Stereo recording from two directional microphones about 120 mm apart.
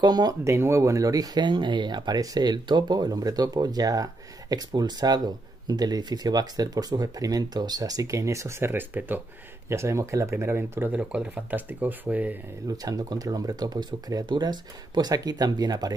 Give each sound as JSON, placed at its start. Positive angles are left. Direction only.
{"t": 0.0, "sound": "speech", "side_deg": -35}
{"t": 12.6, "sound": "speech", "side_deg": -30}